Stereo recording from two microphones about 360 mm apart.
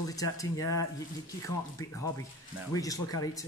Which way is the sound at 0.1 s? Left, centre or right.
Centre.